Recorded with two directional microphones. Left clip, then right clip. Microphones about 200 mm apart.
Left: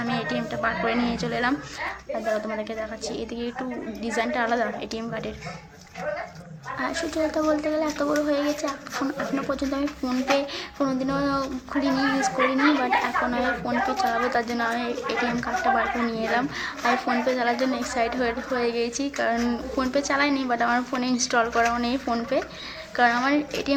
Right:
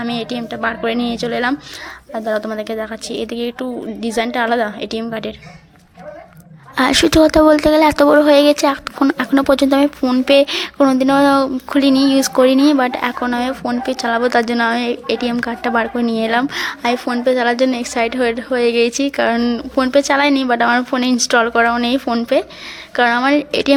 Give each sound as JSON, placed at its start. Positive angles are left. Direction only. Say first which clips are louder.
{"t": 0.0, "sound": "a woman's voice", "louder": "right 5 dB", "side_deg": -30}
{"t": 6.7, "sound": "speech", "louder": "right 15 dB", "side_deg": -50}